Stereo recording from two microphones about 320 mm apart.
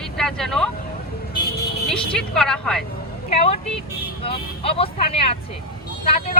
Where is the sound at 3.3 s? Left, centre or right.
Centre.